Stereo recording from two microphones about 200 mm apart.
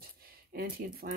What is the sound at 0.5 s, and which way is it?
Speech, 50° right (ahead or behind).